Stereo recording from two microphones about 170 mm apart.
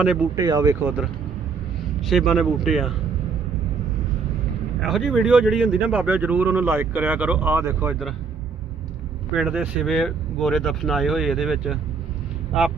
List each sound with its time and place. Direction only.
0.3 s speech: 25° right (ahead or behind)
2.0 s speech: centre (ahead or behind)
4.8 s speech: centre (ahead or behind)
9.3 s speech: 5° right (ahead or behind)